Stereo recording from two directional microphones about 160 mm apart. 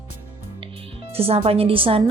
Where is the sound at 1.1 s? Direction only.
35° right (ahead or behind).